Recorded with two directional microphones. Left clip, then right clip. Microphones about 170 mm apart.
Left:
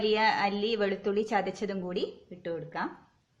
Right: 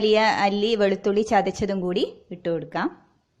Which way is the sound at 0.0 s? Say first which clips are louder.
Right 7 dB; 50° right (ahead or behind).